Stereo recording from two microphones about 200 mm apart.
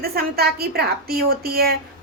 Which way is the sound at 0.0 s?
50° right (ahead or behind).